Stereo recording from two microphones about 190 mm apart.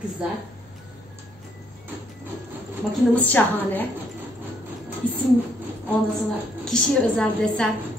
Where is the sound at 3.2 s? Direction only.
10° left (ahead or behind).